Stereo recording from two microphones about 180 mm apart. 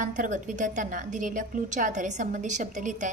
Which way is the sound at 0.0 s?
45° right (ahead or behind).